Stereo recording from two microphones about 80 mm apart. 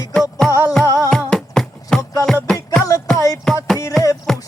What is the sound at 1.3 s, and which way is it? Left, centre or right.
Music, centre.